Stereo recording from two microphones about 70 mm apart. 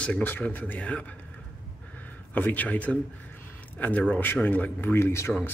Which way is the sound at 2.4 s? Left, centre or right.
Left.